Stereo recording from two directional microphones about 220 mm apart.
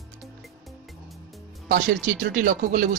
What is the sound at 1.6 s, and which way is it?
Speech, 35° right (ahead or behind).